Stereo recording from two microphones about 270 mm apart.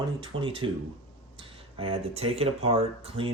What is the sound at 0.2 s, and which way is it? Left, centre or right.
Speech, centre.